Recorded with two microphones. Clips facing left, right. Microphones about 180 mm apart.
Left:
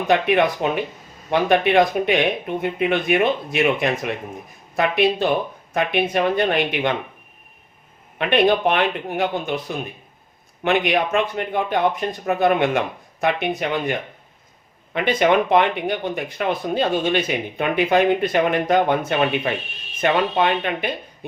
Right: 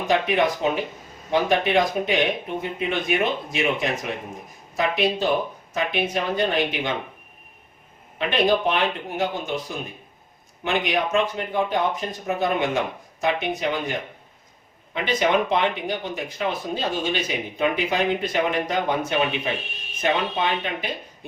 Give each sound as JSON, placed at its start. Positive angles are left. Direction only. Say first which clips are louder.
{"t": 0.1, "sound": "speech", "louder": "left 3 dB", "side_deg": 60}
{"t": 5.7, "sound": "speech", "louder": "left 4 dB", "side_deg": 60}
{"t": 8.3, "sound": "speech", "louder": "left 4 dB", "side_deg": 60}
{"t": 14.9, "sound": "speech", "louder": "left 4 dB", "side_deg": 60}